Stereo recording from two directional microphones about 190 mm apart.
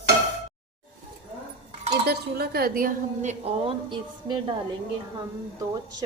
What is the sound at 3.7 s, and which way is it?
Speech, 25° right (ahead or behind).